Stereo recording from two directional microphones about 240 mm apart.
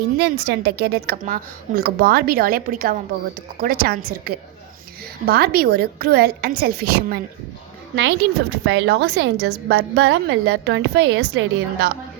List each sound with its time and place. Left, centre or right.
0.2 s a woman's voice: right